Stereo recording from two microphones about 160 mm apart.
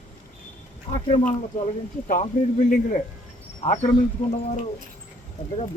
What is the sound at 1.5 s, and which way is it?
A man's voice, 55° left (ahead or behind).